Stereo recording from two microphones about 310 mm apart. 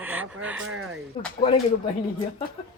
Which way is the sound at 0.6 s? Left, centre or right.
Right.